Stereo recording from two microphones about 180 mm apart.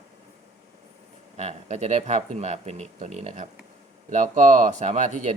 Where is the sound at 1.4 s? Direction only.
40° right (ahead or behind).